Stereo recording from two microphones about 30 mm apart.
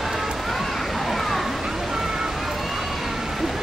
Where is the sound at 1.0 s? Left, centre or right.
Centre.